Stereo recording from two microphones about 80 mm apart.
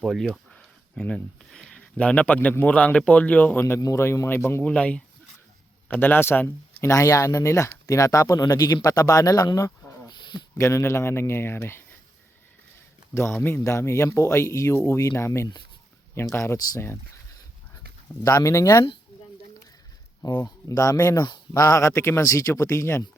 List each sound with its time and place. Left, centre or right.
0.0 s speech: centre; by 3.8 s left
3.8 s speech: left
4.6 s speech: centre
5.9 s speech: left
6.8 s speech: left
10.6 s speech: left
13.1 s speech: left
18.2 s speech: left
20.4 s speech: left